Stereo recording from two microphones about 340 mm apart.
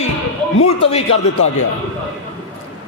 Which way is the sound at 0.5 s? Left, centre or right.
Left.